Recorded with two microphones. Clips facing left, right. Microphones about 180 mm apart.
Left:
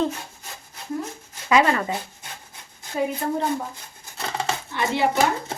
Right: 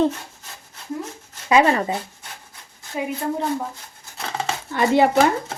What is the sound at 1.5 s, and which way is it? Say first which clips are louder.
Speech: right 2 dB; 25° right (ahead or behind).